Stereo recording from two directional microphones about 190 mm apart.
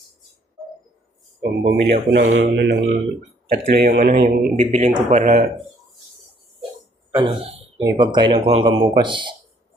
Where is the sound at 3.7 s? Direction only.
55° right (ahead or behind).